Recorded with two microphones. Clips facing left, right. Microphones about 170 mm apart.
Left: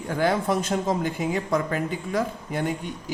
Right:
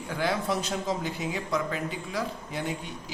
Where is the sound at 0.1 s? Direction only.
50° left (ahead or behind).